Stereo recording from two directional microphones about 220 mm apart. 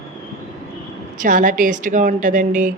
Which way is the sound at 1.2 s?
40° right (ahead or behind).